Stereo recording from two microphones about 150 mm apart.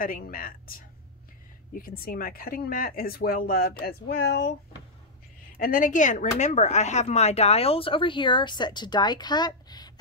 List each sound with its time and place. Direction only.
0.0 s speech: 70° left (ahead or behind); by 4.5 s 90° left
5.6 s speech: 65° left (ahead or behind); by 9.8 s 30° left (ahead or behind)